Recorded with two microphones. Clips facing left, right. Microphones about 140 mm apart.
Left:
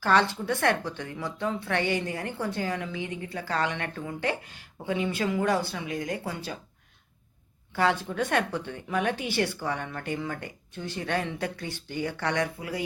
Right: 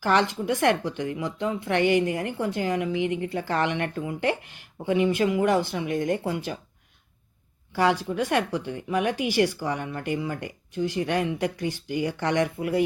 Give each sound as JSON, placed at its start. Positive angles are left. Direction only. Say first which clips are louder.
{"t": 0.0, "sound": "speech", "louder": "right 1 dB", "side_deg": -15}
{"t": 7.8, "sound": "speech", "louder": "right 3 dB", "side_deg": -10}